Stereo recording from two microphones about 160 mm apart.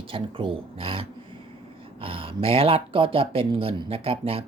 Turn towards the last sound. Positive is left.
turn(degrees=-35)  # may be behind; listen again after turning